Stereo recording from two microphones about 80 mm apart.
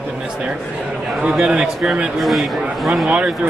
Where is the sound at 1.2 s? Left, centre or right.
Centre.